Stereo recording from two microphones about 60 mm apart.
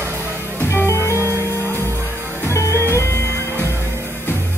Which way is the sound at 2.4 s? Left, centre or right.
Left.